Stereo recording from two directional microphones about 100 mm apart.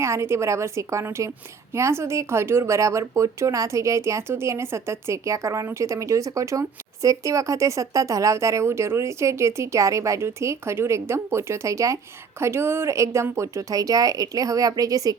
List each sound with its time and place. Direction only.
0.0 s speech: 25° right (ahead or behind)